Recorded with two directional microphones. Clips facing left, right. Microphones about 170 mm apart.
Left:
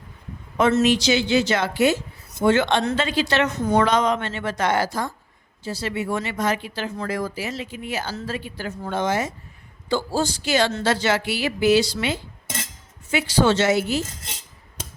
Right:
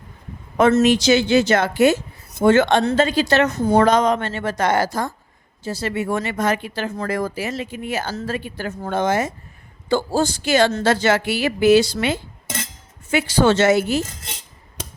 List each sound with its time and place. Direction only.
0.5 s a woman's voice: 50° right (ahead or behind)